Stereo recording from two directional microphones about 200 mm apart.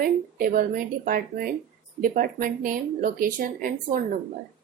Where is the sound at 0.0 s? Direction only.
45° right (ahead or behind).